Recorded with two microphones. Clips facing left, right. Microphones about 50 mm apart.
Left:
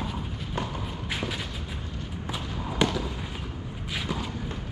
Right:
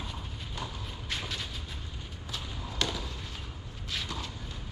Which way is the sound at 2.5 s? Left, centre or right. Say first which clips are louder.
Left 8 dB; left.